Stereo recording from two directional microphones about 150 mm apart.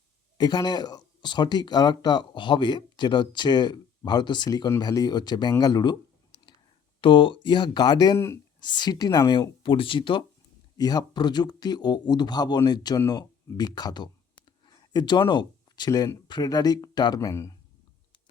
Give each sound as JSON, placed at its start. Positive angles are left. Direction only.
{"t": 0.3, "sound": "speech", "side_deg": 30}
{"t": 6.3, "sound": "whispering", "side_deg": 40}
{"t": 7.0, "sound": "speech", "side_deg": 35}